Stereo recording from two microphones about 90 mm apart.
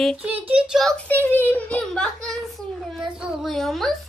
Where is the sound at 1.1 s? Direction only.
20° left (ahead or behind).